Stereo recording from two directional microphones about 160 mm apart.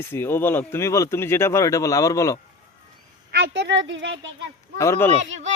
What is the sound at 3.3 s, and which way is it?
Speech, 90° right.